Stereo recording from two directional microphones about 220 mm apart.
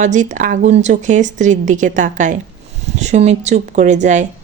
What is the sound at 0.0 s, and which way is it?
A woman's voice, 35° right (ahead or behind).